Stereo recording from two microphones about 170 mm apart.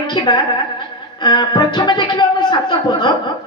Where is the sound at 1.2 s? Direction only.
25° left (ahead or behind).